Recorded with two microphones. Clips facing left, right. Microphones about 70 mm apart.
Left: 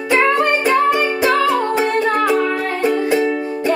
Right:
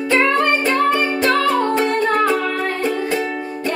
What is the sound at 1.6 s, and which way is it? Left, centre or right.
Humming, centre.